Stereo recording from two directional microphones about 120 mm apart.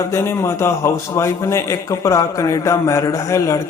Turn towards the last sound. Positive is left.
turn(degrees=25)  # may be behind; listen again after turning